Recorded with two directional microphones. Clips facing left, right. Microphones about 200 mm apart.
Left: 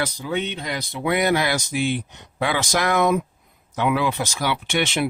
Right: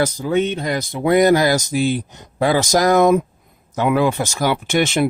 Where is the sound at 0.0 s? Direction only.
45° right (ahead or behind).